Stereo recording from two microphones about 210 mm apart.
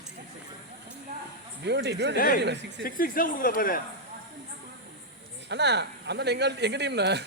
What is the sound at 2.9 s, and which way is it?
Speech, 40° left (ahead or behind).